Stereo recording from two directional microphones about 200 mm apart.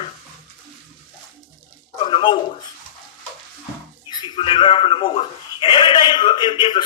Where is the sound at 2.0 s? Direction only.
25° left (ahead or behind).